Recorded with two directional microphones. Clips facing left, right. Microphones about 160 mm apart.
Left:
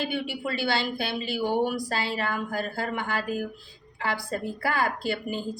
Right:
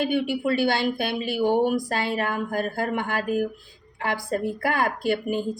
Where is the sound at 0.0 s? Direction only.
50° right (ahead or behind).